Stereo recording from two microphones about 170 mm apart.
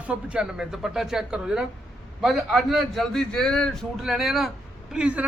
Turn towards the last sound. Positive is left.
turn(degrees=-5)  # may be behind; listen again after turning